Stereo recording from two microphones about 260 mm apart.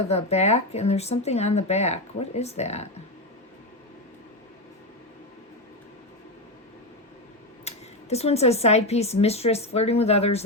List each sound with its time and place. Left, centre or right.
0.1 s speech: left
7.7 s a sound: left
8.1 s speech: left